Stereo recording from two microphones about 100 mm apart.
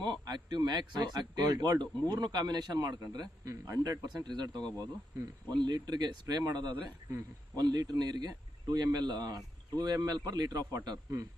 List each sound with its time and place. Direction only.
0.0 s speech: 45° right (ahead or behind)
4.0 s speech: 45° right (ahead or behind)